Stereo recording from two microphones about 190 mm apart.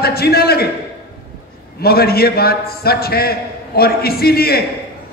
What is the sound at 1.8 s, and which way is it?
A man's voice, 55° left (ahead or behind).